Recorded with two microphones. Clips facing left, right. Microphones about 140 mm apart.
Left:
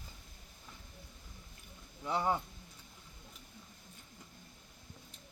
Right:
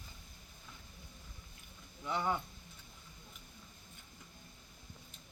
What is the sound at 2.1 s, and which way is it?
Speech, 35° left (ahead or behind).